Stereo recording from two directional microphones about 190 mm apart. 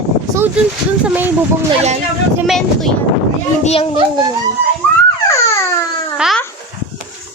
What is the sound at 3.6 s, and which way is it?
Speech, 30° left (ahead or behind).